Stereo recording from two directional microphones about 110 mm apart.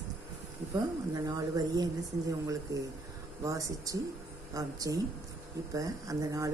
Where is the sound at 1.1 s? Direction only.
35° right (ahead or behind).